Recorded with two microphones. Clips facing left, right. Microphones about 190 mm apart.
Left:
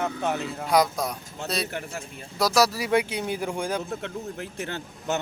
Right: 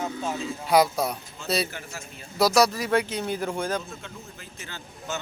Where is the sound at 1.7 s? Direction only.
55° left (ahead or behind).